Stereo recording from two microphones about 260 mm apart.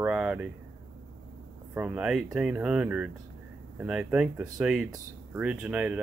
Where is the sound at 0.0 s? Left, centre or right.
Centre.